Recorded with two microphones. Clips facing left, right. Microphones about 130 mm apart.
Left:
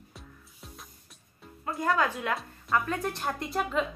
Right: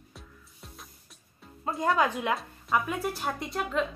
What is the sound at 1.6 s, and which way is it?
Speech, 25° right (ahead or behind).